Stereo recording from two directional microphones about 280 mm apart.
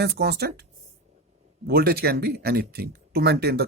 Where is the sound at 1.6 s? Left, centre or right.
Right.